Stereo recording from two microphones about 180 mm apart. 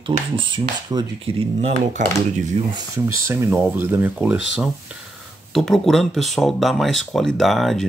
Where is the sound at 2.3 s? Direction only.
40° right (ahead or behind).